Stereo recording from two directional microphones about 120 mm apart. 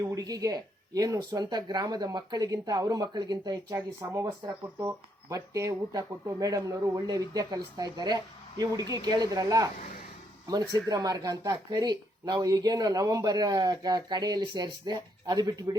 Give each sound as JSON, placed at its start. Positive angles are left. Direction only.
{"t": 0.0, "sound": "speech", "side_deg": -30}